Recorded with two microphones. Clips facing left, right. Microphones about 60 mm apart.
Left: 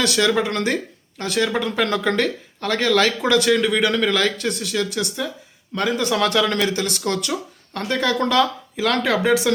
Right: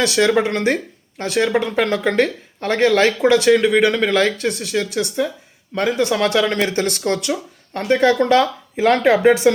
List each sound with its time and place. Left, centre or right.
0.0 s speech: right
6.7 s speech: right
7.0 s speech: right